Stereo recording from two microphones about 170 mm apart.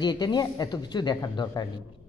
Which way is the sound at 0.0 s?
25° left (ahead or behind).